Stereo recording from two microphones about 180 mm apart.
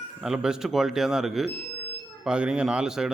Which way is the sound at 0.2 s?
5° right (ahead or behind).